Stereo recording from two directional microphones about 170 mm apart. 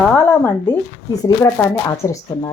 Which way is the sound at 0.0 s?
10° left (ahead or behind).